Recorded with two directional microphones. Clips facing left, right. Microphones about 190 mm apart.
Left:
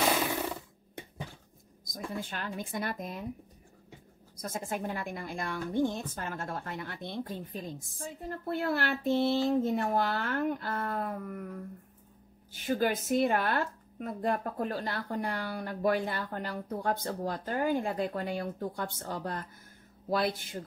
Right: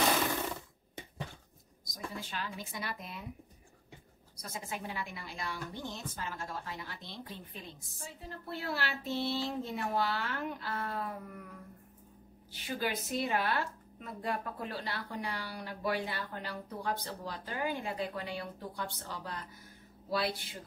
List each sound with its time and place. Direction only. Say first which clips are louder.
2.1 s a woman's voice: left 5 dB; 55° left (ahead or behind)
4.4 s a woman's voice: left 6 dB; 50° left (ahead or behind)
12.5 s a woman's voice: left 7 dB; 50° left (ahead or behind)